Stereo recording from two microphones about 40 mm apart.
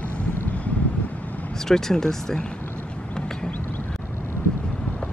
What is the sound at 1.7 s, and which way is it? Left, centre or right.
Speech, centre.